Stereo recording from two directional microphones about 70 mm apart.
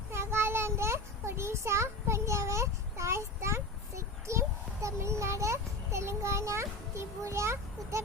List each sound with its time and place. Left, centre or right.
0.1 s child singing: right